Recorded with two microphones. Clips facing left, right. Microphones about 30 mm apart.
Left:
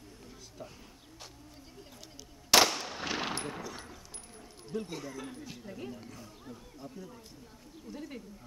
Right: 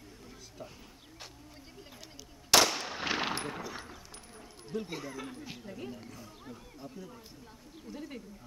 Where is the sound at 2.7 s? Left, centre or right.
Centre.